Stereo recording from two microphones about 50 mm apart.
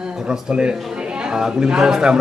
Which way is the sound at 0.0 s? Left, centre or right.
Centre.